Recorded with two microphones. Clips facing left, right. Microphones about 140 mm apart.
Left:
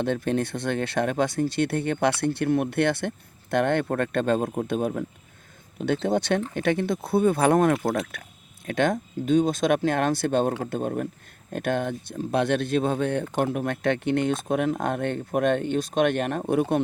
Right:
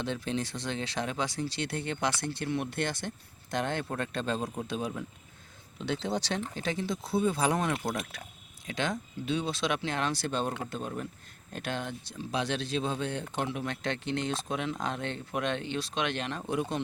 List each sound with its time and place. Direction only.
0.0 s speech: 55° left (ahead or behind)